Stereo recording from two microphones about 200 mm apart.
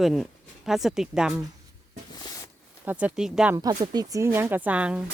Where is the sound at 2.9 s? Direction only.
5° right (ahead or behind).